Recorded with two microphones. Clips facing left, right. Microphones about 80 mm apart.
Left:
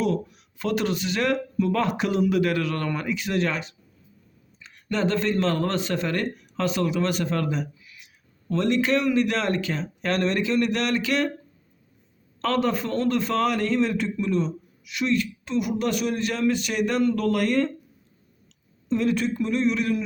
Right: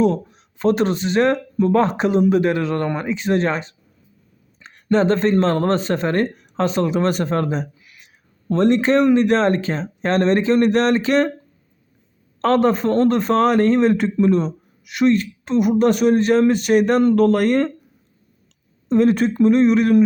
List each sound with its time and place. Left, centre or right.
0.0 s a man's voice: right
12.4 s a man's voice: right
18.9 s speech: right